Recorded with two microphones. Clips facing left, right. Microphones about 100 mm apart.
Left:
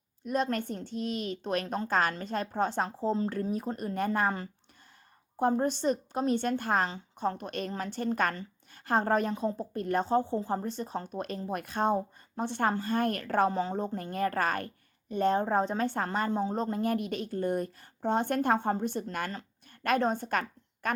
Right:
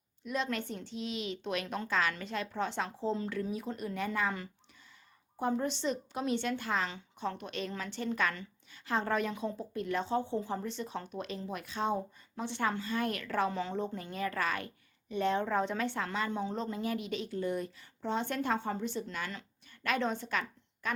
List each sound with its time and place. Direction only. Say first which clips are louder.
0.3 s a woman's voice: left 5 dB; 45° left (ahead or behind)